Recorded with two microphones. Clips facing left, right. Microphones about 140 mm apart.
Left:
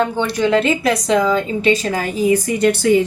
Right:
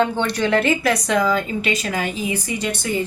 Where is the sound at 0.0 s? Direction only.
10° left (ahead or behind).